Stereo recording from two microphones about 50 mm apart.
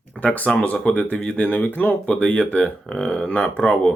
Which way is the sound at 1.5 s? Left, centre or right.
Left.